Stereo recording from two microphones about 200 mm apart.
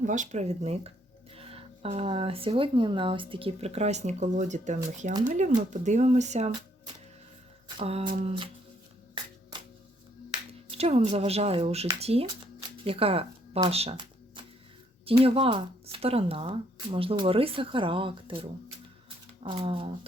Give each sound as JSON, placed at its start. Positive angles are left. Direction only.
{"t": 0.0, "sound": "speech", "side_deg": -40}
{"t": 7.8, "sound": "speech", "side_deg": -30}
{"t": 10.7, "sound": "speech", "side_deg": -30}
{"t": 13.7, "sound": "a sound", "side_deg": -30}
{"t": 15.0, "sound": "speech", "side_deg": -30}